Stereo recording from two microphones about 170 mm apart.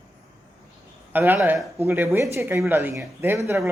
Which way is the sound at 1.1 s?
10° right (ahead or behind).